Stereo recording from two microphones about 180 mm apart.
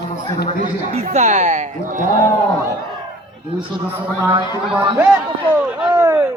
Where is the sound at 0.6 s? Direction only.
45° right (ahead or behind).